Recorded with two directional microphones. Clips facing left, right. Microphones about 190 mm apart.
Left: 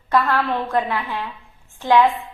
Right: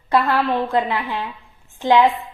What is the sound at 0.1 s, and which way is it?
A woman's voice, 15° right (ahead or behind).